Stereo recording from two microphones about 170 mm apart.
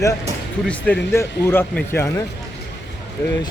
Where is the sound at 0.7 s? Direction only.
10° left (ahead or behind).